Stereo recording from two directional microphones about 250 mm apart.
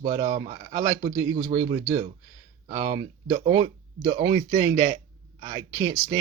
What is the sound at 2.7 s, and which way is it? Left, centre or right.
Speech, right.